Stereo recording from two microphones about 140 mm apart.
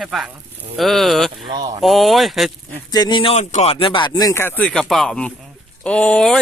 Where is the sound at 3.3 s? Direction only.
55° left (ahead or behind); by 4.7 s 15° left (ahead or behind).